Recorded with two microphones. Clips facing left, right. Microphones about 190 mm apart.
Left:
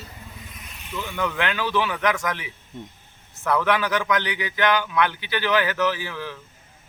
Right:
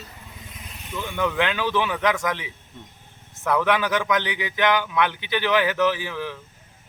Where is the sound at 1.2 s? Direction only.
20° right (ahead or behind).